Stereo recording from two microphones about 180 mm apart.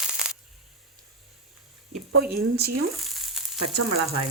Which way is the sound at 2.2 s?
60° right (ahead or behind).